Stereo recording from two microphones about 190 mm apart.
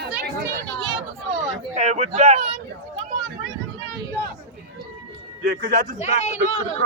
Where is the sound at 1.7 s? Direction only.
40° right (ahead or behind).